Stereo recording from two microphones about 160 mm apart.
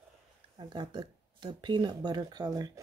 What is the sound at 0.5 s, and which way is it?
Speech, 30° right (ahead or behind).